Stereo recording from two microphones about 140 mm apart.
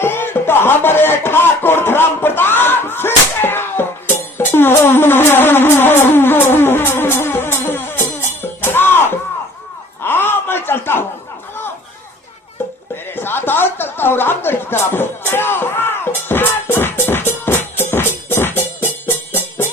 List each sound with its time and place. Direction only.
0.0 s music: 15° left (ahead or behind)
10.0 s a sound: 15° left (ahead or behind)
13.1 s music: 15° left (ahead or behind)